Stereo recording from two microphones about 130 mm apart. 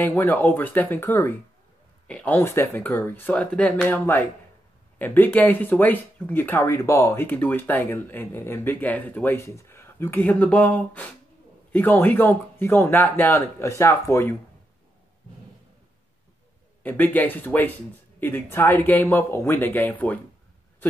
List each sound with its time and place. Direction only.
0.0 s speech: 15° left (ahead or behind)
16.8 s speech: 15° left (ahead or behind)